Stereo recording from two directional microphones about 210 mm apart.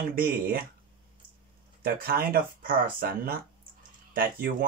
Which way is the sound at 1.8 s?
45° right (ahead or behind).